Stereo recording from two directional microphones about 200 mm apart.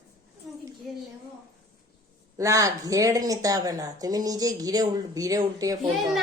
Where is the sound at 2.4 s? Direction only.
15° right (ahead or behind).